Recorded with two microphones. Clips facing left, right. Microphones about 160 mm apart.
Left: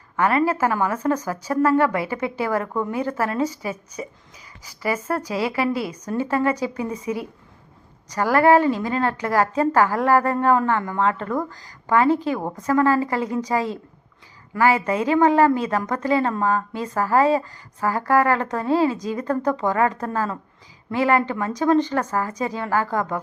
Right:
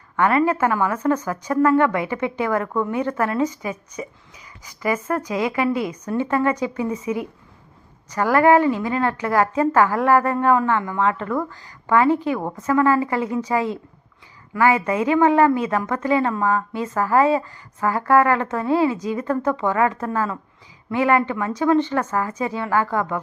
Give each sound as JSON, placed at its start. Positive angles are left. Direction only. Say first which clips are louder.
{"t": 0.2, "sound": "a woman's voice", "louder": "right 1 dB", "side_deg": 30}